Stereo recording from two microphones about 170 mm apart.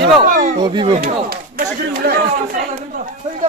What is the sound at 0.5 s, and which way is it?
Speech, 25° right (ahead or behind).